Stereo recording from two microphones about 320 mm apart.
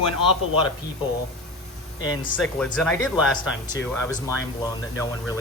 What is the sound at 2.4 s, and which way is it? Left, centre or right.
Speech, centre.